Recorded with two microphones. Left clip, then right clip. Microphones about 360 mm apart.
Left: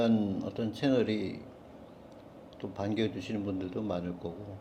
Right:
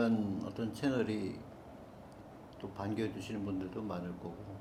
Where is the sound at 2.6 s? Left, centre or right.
Left.